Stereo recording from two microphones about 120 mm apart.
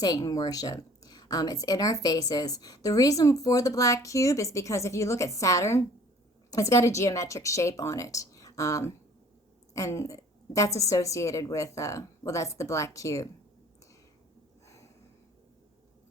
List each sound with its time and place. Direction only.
0.0 s a woman's voice: 30° left (ahead or behind)